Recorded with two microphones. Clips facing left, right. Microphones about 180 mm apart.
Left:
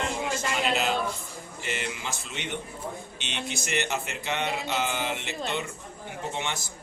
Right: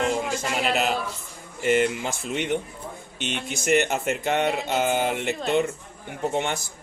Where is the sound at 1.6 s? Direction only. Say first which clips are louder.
Right 12 dB; 50° right (ahead or behind).